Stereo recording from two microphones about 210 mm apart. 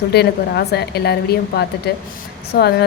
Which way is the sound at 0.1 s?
50° left (ahead or behind).